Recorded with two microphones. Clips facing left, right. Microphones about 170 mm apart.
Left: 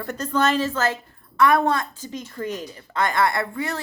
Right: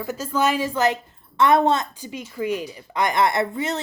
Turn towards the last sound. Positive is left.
turn(degrees=-20)  # may be behind; listen again after turning